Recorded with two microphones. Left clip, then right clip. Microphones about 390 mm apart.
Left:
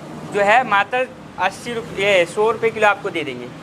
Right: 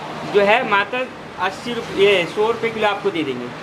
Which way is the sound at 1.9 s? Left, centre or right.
Left.